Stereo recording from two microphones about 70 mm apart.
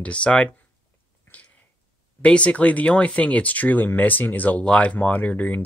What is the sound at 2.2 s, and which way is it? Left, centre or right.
Speech, centre.